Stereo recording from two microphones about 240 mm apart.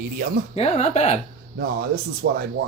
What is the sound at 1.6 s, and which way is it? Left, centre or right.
Speech, right.